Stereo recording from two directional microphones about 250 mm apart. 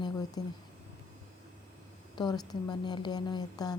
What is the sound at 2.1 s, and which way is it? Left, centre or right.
A woman's voice, centre.